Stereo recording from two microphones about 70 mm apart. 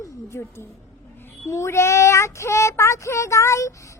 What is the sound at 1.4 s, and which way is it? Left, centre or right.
Child singing, left.